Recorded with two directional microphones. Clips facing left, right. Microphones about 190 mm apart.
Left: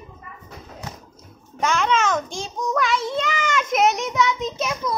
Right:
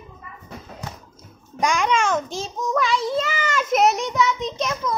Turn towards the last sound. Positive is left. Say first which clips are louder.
# even
turn(degrees=10)  # may be behind; listen again after turning